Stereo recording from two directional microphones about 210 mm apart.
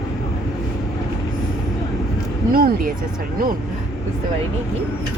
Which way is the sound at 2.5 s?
45° right (ahead or behind).